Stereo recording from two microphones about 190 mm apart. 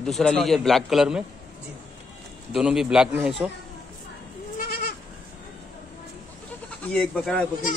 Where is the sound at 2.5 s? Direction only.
5° right (ahead or behind).